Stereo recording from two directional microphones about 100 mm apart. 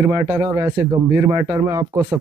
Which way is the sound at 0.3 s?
25° right (ahead or behind).